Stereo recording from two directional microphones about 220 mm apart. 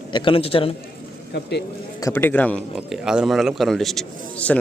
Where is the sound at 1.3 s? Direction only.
50° left (ahead or behind).